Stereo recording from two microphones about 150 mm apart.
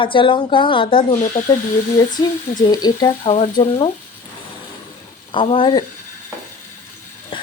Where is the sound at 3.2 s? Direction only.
40° left (ahead or behind).